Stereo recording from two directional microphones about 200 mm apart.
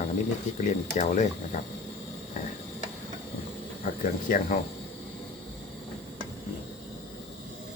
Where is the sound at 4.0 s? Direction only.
45° left (ahead or behind).